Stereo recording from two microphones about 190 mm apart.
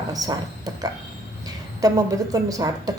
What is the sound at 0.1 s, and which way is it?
A woman's voice, 20° right (ahead or behind).